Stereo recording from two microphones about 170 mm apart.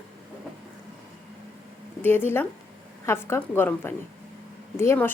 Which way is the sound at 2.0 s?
10° left (ahead or behind).